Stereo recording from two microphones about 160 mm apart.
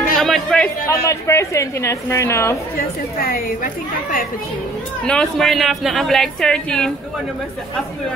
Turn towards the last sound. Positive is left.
turn(degrees=5)  # may be behind; listen again after turning